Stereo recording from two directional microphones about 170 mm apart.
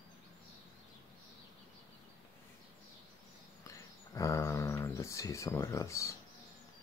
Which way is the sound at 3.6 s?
20° left (ahead or behind).